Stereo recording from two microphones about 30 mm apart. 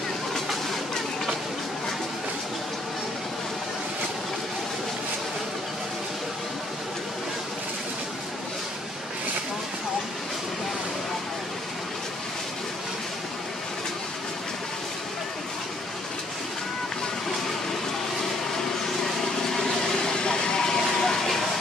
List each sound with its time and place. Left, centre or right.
20.1 s vehicle: left; by 21.4 s centre